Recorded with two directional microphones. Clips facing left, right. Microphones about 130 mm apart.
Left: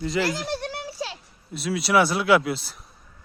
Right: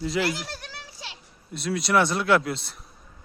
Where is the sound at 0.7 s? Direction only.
60° left (ahead or behind).